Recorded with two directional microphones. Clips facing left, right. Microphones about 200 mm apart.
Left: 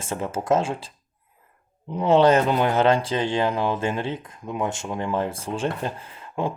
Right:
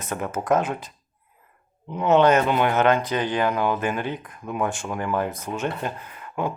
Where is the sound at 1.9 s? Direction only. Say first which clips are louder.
Left 1 dB; 30° left (ahead or behind).